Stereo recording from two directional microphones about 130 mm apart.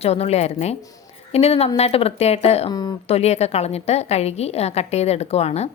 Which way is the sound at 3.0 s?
50° left (ahead or behind).